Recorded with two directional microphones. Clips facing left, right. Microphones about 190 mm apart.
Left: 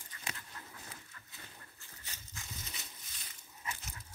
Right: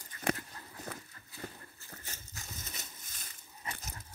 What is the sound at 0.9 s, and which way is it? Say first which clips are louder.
Horse: right 9 dB; 60° right (ahead or behind).